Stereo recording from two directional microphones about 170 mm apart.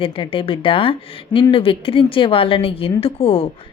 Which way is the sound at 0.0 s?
30° left (ahead or behind).